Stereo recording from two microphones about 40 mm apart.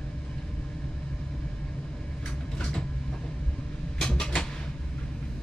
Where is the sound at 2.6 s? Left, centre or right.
Left.